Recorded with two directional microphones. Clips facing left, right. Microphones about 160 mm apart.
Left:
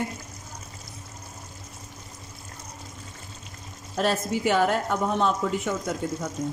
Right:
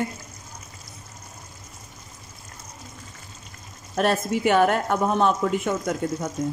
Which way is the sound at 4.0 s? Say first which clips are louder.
Right 3 dB; 60° right (ahead or behind).